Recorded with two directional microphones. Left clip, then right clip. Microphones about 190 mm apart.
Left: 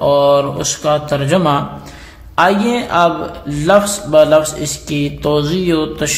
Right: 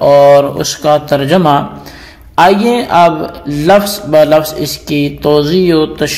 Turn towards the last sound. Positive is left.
turn(degrees=-15)  # may be behind; listen again after turning